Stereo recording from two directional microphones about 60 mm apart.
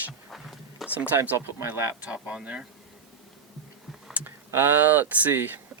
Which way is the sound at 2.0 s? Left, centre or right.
Right.